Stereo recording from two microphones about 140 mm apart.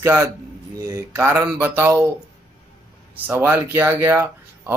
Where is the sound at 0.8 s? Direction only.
20° right (ahead or behind).